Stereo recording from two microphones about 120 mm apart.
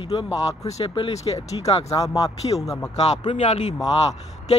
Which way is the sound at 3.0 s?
60° left (ahead or behind).